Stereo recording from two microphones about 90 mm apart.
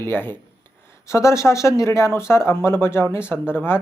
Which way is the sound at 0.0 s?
25° left (ahead or behind).